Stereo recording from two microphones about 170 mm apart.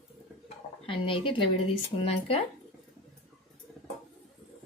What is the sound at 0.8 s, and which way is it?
A woman's voice, 30° left (ahead or behind).